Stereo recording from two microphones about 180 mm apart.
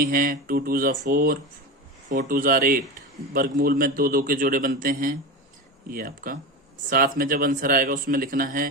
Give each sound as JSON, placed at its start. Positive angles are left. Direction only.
{"t": 0.0, "sound": "a man's voice", "side_deg": -50}